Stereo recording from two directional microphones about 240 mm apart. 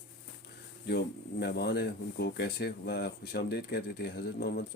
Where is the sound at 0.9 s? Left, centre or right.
Left.